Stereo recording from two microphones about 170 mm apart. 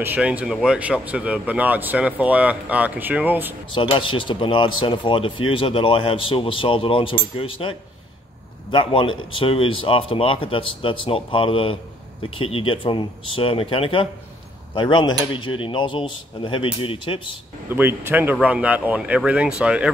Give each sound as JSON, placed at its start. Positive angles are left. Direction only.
{"t": 0.0, "sound": "speech", "side_deg": -10}
{"t": 3.7, "sound": "speech", "side_deg": 30}
{"t": 8.7, "sound": "speech", "side_deg": 30}
{"t": 17.6, "sound": "speech", "side_deg": -15}